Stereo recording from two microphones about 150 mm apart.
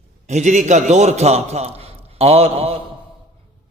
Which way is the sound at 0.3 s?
50° right (ahead or behind).